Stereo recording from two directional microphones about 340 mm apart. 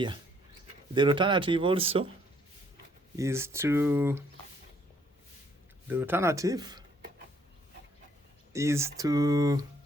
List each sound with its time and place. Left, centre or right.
0.9 s speech: centre
3.2 s speech: centre
5.9 s speech: centre
8.5 s speech: centre